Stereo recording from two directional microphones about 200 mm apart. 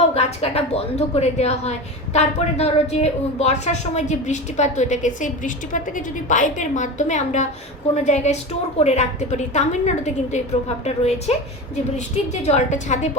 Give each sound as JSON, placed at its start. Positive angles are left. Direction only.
{"t": 0.1, "sound": "a woman's voice", "side_deg": 30}